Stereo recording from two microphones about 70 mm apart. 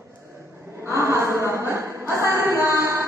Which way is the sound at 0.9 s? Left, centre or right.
Right.